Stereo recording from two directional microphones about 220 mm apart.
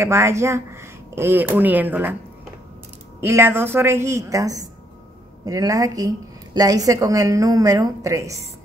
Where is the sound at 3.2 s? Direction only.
10° right (ahead or behind).